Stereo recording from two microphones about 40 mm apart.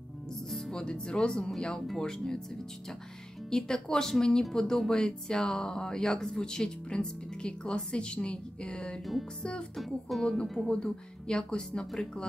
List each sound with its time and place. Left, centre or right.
0.5 s music: centre
0.7 s speech: left
3.4 s speech: centre
9.8 s speech: centre
10.7 s speech: centre